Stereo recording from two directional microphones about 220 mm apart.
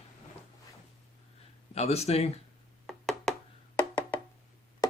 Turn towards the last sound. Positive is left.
turn(degrees=15)  # may be behind; listen again after turning